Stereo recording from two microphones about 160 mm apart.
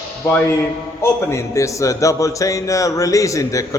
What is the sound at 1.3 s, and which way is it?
A man's voice, 20° left (ahead or behind).